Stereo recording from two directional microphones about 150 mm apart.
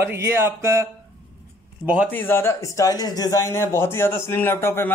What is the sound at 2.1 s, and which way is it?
Speech, 15° left (ahead or behind).